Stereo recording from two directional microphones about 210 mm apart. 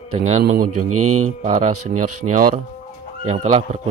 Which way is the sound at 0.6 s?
90° right.